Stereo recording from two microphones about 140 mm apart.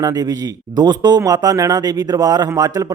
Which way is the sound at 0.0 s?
25° right (ahead or behind).